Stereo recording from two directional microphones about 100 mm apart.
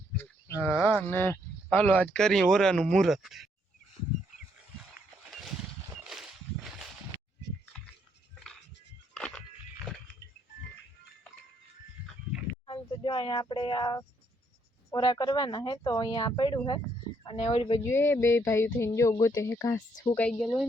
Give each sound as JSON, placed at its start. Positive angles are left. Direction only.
{"t": 0.6, "sound": "livestock", "side_deg": -5}
{"t": 0.9, "sound": "speech", "side_deg": 20}
{"t": 5.3, "sound": "a sound", "side_deg": 0}
{"t": 9.1, "sound": "a sound", "side_deg": 10}
{"t": 12.6, "sound": "speech", "side_deg": 55}
{"t": 17.2, "sound": "a woman's voice", "side_deg": 70}
{"t": 17.7, "sound": "speech", "side_deg": 25}
{"t": 20.1, "sound": "speech", "side_deg": 15}
{"t": 20.4, "sound": "speech", "side_deg": 0}